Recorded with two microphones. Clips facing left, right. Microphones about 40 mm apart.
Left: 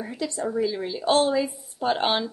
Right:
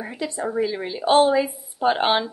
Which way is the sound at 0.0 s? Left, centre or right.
Right.